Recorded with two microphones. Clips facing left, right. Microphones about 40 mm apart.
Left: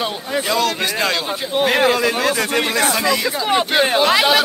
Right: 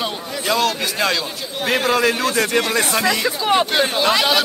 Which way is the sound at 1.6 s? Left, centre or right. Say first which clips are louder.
Left 3 dB; centre.